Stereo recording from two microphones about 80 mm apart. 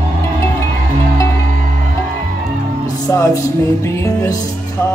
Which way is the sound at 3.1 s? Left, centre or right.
Left.